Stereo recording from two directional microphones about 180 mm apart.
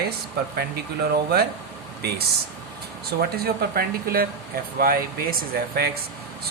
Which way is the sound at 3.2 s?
55° right (ahead or behind).